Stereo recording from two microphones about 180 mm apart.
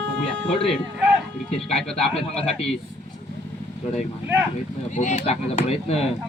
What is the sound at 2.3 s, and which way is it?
Speech, 35° left (ahead or behind).